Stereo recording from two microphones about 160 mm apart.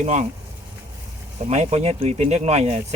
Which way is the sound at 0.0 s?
45° right (ahead or behind).